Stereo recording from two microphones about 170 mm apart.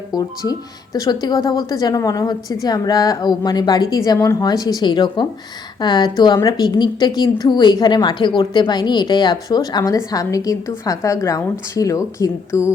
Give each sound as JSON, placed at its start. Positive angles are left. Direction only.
{"t": 0.1, "sound": "a woman's voice", "side_deg": 20}